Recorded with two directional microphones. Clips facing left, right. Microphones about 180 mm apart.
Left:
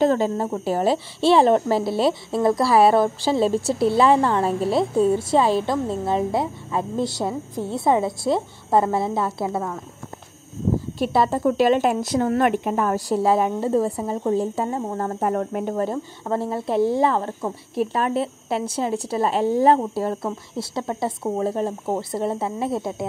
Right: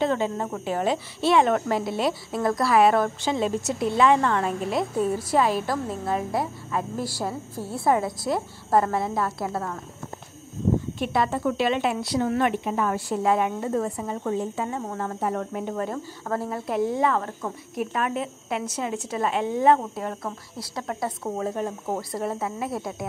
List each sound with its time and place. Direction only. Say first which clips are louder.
0.0 s a woman's voice: left 5 dB; 40° left (ahead or behind)
11.0 s a woman's voice: left 4 dB; 35° left (ahead or behind)
15.7 s speech: left 5 dB; 30° left (ahead or behind)